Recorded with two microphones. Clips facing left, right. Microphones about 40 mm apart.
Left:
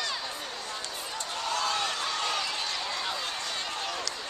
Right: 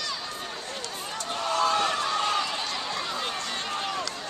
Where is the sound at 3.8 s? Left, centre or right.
Centre.